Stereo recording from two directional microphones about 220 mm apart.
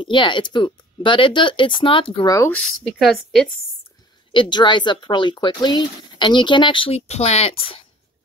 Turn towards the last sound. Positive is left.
turn(degrees=25)  # may be behind; listen again after turning